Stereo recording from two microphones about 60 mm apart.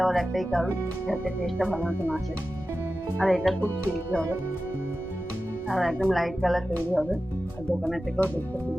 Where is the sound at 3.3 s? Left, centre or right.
Centre.